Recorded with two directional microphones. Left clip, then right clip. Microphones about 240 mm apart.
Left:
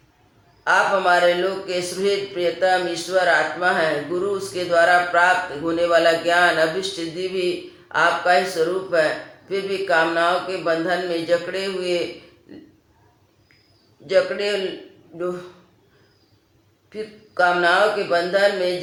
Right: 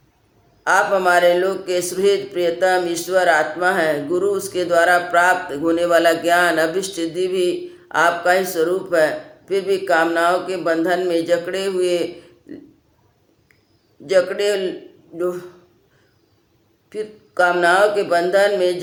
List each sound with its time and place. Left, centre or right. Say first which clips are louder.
0.6 s a man's voice: right 2 dB; right
14.1 s a man's voice: right 3 dB; right
16.9 s a man's voice: right 4 dB; right